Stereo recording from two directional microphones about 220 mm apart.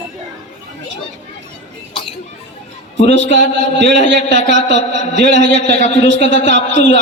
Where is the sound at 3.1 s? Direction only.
55° right (ahead or behind).